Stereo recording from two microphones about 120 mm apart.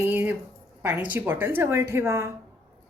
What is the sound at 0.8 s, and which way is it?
A woman's voice, 10° right (ahead or behind).